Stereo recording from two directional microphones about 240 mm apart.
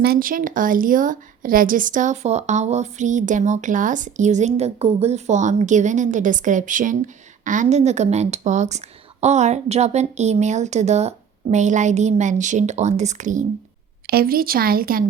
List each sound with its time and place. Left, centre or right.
0.0 s a woman's voice: right